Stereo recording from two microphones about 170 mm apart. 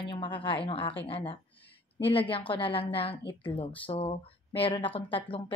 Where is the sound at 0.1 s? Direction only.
30° left (ahead or behind).